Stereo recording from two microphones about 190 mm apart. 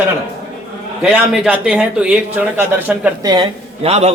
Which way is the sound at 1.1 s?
5° right (ahead or behind).